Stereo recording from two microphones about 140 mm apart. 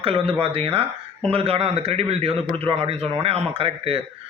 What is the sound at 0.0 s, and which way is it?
A man's voice, 40° right (ahead or behind).